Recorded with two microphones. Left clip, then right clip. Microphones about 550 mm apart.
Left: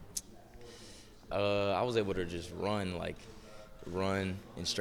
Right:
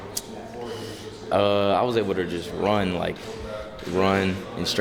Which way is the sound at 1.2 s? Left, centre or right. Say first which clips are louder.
Right 11 dB; left.